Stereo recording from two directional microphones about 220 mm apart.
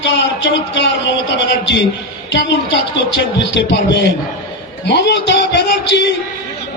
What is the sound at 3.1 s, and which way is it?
Speech, 55° left (ahead or behind).